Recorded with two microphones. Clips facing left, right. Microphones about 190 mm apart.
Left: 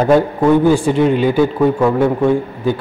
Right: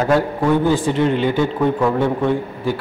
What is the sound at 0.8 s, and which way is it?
A man's voice, 15° left (ahead or behind).